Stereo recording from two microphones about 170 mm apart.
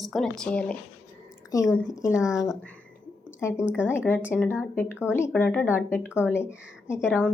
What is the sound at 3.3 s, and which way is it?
Speech, 15° left (ahead or behind).